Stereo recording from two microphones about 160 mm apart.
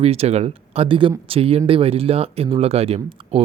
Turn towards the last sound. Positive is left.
turn(degrees=-40)  # may be behind; listen again after turning